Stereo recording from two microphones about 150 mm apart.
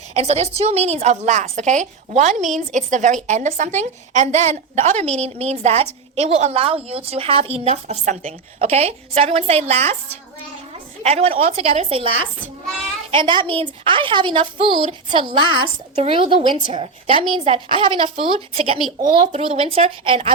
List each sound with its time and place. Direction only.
0.1 s a woman's voice: 45° right (ahead or behind)
11.0 s a woman's voice: 45° right (ahead or behind)